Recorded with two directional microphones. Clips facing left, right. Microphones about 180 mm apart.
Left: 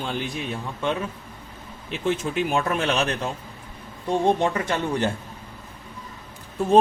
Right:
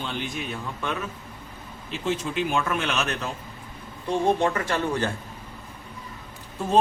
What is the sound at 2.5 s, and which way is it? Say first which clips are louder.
Speech: left 4 dB; 35° left (ahead or behind).